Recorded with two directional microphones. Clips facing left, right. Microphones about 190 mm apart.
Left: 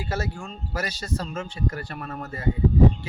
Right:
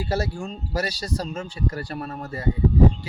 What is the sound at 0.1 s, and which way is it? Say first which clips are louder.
Speech: right 4 dB; 35° right (ahead or behind).